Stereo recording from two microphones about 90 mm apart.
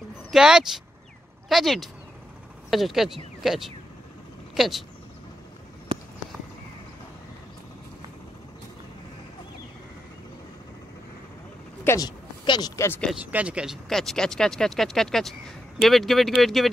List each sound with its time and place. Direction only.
0.3 s speech: 5° right (ahead or behind)
5.9 s a sound: 70° right (ahead or behind)
11.9 s speech: 25° left (ahead or behind)
12.4 s speech: 55° left (ahead or behind)
12.7 s speech: 30° left (ahead or behind)
13.3 s speech: 15° right (ahead or behind)
13.8 s speech: 5° left (ahead or behind)